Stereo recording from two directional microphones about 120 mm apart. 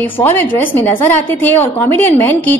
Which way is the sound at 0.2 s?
15° left (ahead or behind).